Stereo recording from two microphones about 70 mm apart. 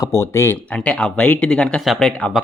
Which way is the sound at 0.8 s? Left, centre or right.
Centre.